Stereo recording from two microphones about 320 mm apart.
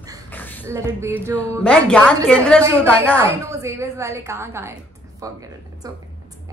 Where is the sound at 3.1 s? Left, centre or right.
Centre.